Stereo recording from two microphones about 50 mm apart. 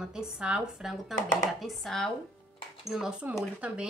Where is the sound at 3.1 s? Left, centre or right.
Right.